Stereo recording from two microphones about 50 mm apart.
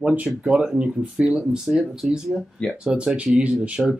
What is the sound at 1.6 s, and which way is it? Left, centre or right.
Speech, centre.